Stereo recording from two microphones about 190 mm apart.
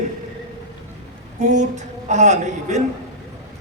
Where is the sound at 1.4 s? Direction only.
40° right (ahead or behind).